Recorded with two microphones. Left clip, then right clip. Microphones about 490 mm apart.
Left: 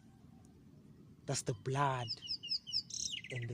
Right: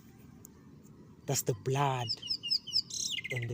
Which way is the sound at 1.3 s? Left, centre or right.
Left.